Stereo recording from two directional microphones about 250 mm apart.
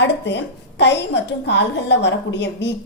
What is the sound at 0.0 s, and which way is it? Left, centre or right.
A woman's voice, left.